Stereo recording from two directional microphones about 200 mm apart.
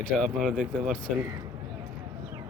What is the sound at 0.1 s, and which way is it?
Speech, centre (ahead or behind).